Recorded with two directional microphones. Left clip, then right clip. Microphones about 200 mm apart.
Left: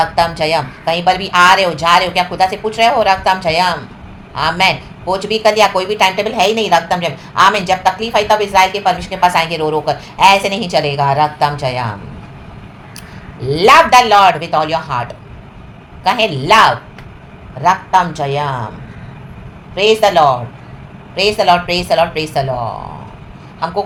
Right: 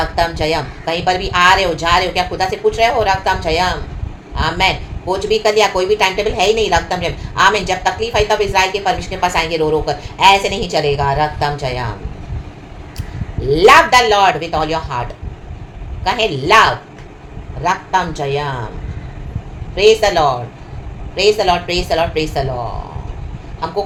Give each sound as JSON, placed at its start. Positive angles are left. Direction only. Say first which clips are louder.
{"t": 0.0, "sound": "speech", "louder": "left 3 dB", "side_deg": 20}
{"t": 13.4, "sound": "speech", "louder": "even", "side_deg": 20}
{"t": 19.7, "sound": "speech", "louder": "left 1 dB", "side_deg": 20}
{"t": 23.6, "sound": "speech", "louder": "left 3 dB", "side_deg": 20}